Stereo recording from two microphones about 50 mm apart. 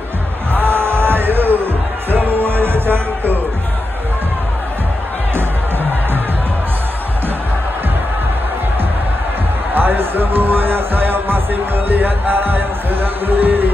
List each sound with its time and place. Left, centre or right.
0.5 s music: right
9.8 s music: right